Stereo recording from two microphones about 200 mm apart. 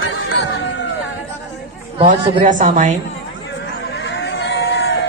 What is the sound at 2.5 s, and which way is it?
Speech, 40° right (ahead or behind).